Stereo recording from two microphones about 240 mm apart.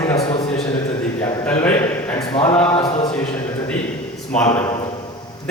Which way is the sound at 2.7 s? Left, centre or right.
Left.